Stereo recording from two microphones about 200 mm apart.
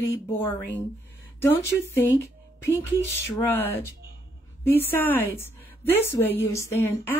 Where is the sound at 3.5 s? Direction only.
10° left (ahead or behind).